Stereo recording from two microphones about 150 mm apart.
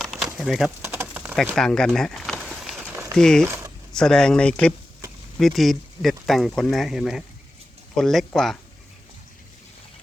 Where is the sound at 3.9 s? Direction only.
5° left (ahead or behind).